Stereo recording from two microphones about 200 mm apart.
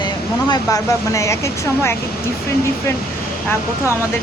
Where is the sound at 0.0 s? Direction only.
20° left (ahead or behind).